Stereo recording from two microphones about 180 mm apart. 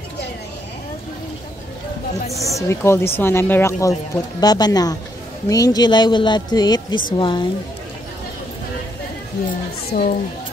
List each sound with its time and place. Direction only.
2.3 s speech: 15° left (ahead or behind)
9.9 s a woman's voice: 65° left (ahead or behind)